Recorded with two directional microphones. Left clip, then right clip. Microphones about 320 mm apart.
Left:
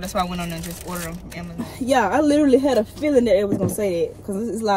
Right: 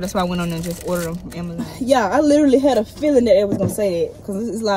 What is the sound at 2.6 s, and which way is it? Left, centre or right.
Speech, right.